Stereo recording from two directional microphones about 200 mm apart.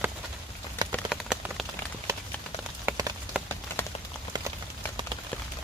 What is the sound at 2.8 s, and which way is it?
Rain on surface, 15° right (ahead or behind).